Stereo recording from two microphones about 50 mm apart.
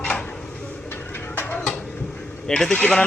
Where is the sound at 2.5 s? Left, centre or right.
Centre.